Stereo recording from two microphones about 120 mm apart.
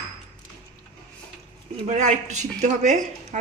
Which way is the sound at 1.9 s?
80° right.